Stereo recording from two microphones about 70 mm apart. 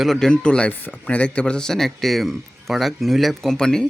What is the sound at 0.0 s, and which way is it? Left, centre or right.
Speech, centre.